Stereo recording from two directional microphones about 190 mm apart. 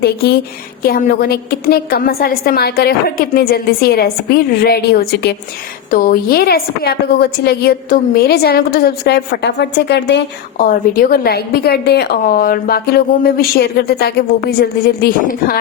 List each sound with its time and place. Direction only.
0.8 s a woman's voice: 50° left (ahead or behind)